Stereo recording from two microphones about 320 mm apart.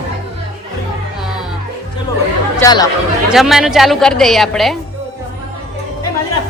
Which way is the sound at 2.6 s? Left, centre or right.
Centre.